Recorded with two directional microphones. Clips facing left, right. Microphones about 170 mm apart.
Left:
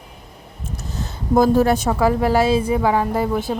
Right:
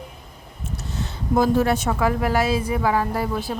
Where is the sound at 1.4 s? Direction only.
40° left (ahead or behind).